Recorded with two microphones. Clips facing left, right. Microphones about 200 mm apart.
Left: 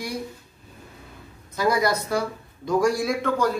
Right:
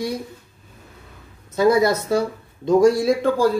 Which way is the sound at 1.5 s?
25° right (ahead or behind).